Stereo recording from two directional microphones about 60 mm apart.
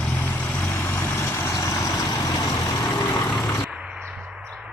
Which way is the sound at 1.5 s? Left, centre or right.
Left.